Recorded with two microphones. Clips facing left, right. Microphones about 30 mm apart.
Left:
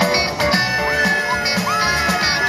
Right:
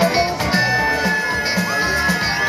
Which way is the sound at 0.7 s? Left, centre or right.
Centre.